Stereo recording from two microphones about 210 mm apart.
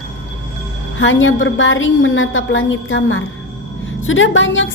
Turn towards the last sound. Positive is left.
turn(degrees=65)  # may be behind; listen again after turning